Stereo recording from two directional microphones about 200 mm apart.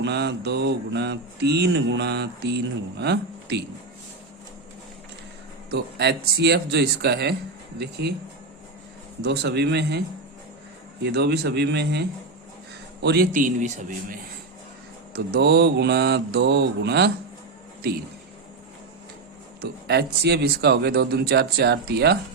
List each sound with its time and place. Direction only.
0.0 s mantra: 60° right (ahead or behind)
3.0 s speech: 60° right (ahead or behind)
5.7 s mantra: 55° right (ahead or behind)
9.2 s mantra: 55° right (ahead or behind)
11.0 s mantra: 55° right (ahead or behind)
13.0 s speech: 55° right (ahead or behind)
15.1 s mantra: 50° right (ahead or behind)
19.6 s speech: 55° right (ahead or behind)